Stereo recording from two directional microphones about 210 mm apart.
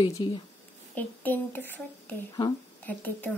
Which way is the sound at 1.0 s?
10° left (ahead or behind).